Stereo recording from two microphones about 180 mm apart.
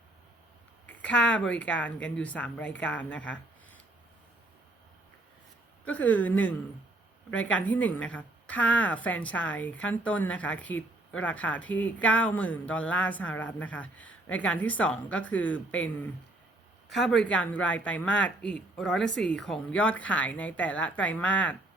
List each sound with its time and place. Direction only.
0.9 s speech: 10° left (ahead or behind)
5.8 s speech: 10° left (ahead or behind)